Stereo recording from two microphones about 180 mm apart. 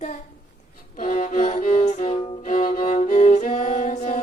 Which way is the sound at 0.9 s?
45° left (ahead or behind).